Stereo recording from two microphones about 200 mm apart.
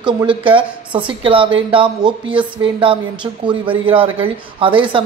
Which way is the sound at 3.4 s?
25° right (ahead or behind).